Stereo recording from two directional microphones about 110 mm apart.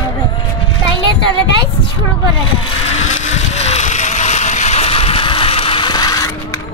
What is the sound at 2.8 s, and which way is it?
Vehicle, 85° left.